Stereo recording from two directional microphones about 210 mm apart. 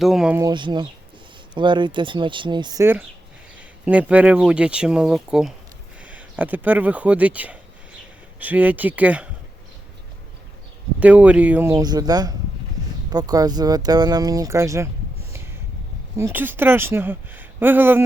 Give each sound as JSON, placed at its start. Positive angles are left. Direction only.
{"t": 0.0, "sound": "speech", "side_deg": 0}
{"t": 0.3, "sound": "speech", "side_deg": -20}
{"t": 11.0, "sound": "speech", "side_deg": -5}
{"t": 16.1, "sound": "speech", "side_deg": -10}